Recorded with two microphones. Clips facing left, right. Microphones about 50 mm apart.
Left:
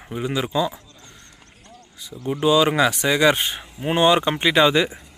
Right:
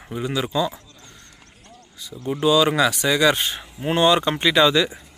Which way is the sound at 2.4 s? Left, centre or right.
Left.